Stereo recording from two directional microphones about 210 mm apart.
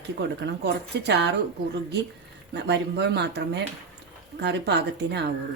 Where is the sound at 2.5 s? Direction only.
55° right (ahead or behind).